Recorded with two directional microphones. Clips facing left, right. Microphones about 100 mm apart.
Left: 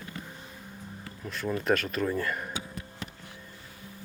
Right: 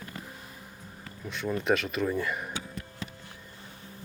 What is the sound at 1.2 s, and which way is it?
Speech, centre (ahead or behind).